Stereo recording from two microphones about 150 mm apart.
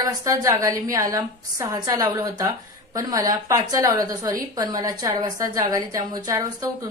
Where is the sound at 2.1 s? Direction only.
15° right (ahead or behind).